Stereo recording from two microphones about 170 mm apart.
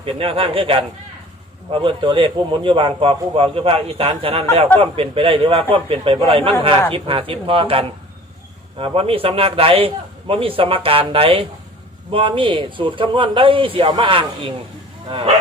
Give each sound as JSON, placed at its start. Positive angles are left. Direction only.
{"t": 0.0, "sound": "a man's voice", "side_deg": -35}